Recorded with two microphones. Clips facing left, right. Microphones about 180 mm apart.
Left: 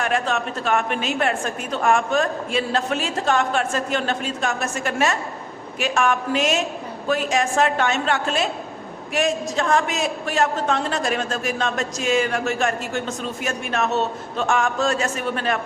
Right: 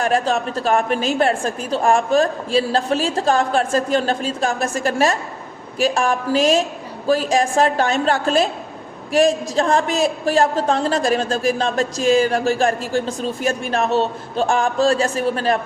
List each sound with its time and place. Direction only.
0.0 s a woman's voice: 35° right (ahead or behind)